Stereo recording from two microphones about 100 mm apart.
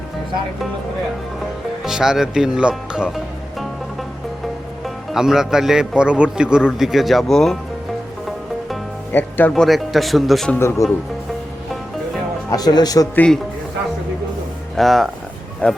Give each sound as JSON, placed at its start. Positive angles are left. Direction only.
{"t": 1.8, "sound": "a man's voice", "side_deg": -5}
{"t": 5.1, "sound": "a man's voice", "side_deg": -5}
{"t": 9.1, "sound": "speech", "side_deg": 25}
{"t": 9.5, "sound": "a man's voice", "side_deg": 0}
{"t": 10.6, "sound": "speech", "side_deg": 25}
{"t": 12.5, "sound": "speech", "side_deg": 40}
{"t": 13.1, "sound": "a man's voice", "side_deg": 10}
{"t": 14.8, "sound": "a man's voice", "side_deg": 0}
{"t": 15.6, "sound": "a man's voice", "side_deg": 15}